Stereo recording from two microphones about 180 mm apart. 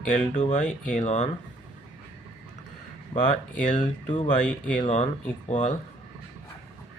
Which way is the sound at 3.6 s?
45° left (ahead or behind).